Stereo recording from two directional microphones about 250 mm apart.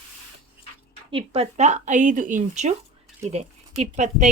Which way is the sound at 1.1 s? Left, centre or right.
Right.